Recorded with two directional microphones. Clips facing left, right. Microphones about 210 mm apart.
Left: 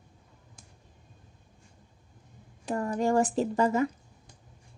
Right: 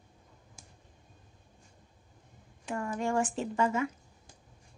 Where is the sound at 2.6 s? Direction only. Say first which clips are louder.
Left 5 dB; 35° left (ahead or behind).